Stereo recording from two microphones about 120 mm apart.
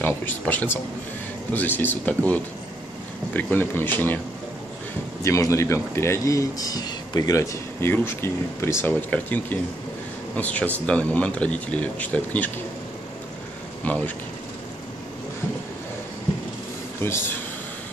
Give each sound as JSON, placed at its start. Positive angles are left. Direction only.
{"t": 0.0, "sound": "speech", "side_deg": 15}
{"t": 5.2, "sound": "a man's voice", "side_deg": 25}
{"t": 13.8, "sound": "speech", "side_deg": 15}
{"t": 17.0, "sound": "a man's voice", "side_deg": 20}